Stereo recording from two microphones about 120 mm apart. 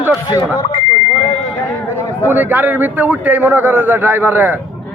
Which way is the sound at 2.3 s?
15° right (ahead or behind).